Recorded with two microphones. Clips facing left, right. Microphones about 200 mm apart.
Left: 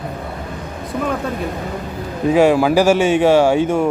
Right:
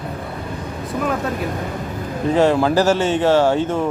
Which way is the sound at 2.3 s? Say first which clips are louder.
Left 3 dB; 10° left (ahead or behind).